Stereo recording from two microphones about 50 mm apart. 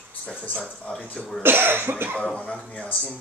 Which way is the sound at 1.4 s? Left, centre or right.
Right.